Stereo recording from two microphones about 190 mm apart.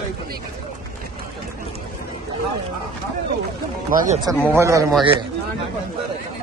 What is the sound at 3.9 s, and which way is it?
Speech, 45° right (ahead or behind).